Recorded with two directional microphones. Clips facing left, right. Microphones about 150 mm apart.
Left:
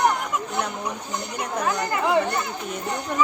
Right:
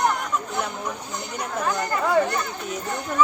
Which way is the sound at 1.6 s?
10° left (ahead or behind).